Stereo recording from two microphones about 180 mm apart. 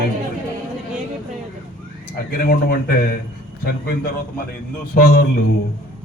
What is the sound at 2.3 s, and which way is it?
Speech, 55° left (ahead or behind).